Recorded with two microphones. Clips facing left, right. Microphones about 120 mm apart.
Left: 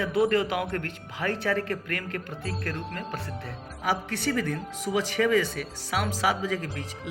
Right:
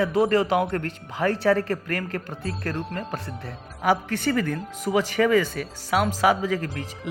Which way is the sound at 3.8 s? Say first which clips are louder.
Right 6 dB; 50° right (ahead or behind).